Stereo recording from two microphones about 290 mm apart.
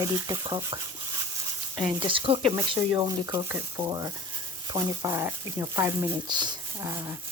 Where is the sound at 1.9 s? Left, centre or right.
Centre.